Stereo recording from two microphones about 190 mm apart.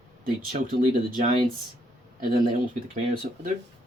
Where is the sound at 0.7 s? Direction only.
45° right (ahead or behind).